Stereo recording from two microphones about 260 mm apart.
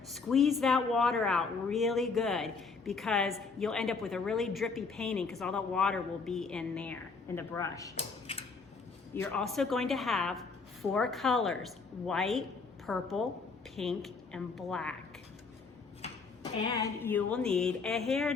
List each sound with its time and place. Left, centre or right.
0.1 s speech: centre
7.9 s a sound: left
9.1 s speech: centre
16.6 s speech: centre